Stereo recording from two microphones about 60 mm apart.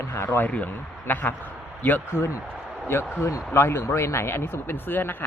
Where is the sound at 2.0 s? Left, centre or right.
Left.